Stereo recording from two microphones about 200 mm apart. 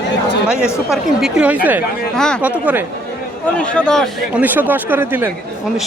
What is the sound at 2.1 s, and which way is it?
Speech, 5° left (ahead or behind).